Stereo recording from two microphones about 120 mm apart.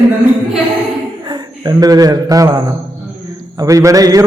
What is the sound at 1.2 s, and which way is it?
A man's voice, 35° right (ahead or behind).